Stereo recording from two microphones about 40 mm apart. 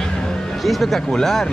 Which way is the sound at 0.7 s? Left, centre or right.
Centre.